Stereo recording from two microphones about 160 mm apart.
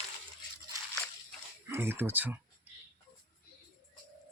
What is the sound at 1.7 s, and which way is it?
Speech, 15° right (ahead or behind).